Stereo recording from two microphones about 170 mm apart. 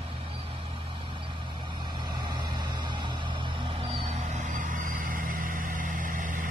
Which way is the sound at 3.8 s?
35° right (ahead or behind).